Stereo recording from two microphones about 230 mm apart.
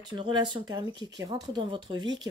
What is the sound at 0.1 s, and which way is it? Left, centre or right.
Speech, centre.